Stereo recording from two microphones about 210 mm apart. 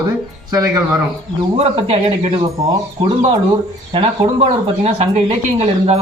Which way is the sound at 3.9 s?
30° right (ahead or behind).